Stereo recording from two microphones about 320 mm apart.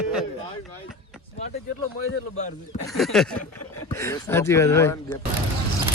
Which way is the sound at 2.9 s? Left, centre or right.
Centre.